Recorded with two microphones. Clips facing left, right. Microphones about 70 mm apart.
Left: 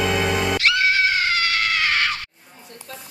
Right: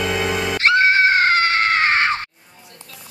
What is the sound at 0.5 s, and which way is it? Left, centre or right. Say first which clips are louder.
Screaming: right 9 dB; right.